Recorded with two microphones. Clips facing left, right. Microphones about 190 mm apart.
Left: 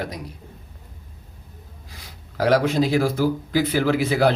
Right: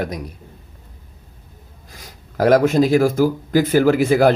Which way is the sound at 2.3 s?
45° right (ahead or behind).